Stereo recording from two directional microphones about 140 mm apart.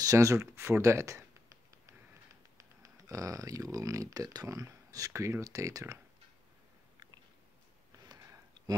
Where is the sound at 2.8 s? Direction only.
20° right (ahead or behind).